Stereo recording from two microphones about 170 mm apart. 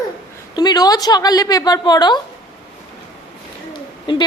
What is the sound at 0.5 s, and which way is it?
Speech, 25° left (ahead or behind).